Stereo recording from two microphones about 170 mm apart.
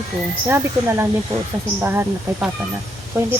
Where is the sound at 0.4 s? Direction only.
15° right (ahead or behind).